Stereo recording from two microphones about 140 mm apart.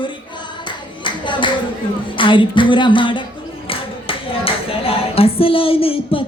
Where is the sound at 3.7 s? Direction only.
40° left (ahead or behind).